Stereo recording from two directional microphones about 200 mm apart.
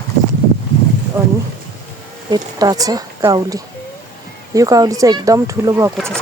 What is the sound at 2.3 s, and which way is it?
Speech, 20° right (ahead or behind).